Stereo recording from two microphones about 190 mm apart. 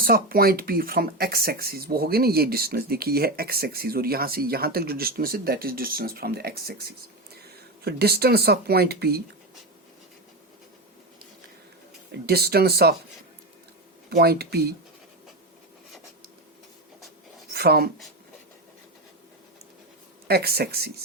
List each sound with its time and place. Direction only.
0.0 s speech: 50° right (ahead or behind)
12.2 s speech: 55° right (ahead or behind)
14.1 s speech: 55° right (ahead or behind)
17.5 s speech: 55° right (ahead or behind)
20.2 s speech: 55° right (ahead or behind)